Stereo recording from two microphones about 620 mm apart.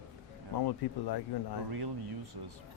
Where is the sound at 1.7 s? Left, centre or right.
Right.